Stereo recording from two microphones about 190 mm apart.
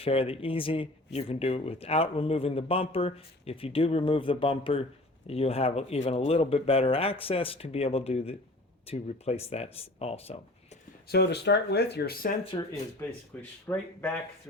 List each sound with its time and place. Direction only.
0.0 s speech: 30° left (ahead or behind)
11.1 s speech: 60° left (ahead or behind)
12.5 s speech: 25° left (ahead or behind)
13.0 s speech: 15° left (ahead or behind)